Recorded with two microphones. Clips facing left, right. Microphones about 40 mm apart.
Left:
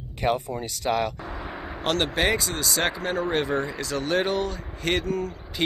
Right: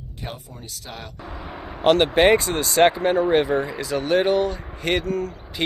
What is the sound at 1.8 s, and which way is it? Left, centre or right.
Speech, centre.